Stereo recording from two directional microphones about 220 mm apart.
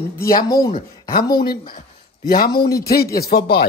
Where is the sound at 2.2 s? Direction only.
45° left (ahead or behind).